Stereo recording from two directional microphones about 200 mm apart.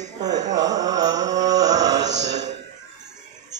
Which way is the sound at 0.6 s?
20° right (ahead or behind).